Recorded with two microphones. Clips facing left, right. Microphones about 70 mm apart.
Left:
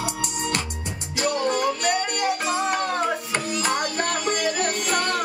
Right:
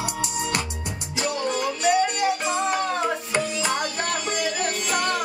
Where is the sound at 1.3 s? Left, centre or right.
Left.